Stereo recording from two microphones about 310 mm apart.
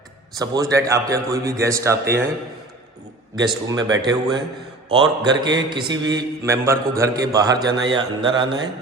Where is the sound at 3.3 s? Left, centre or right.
Centre.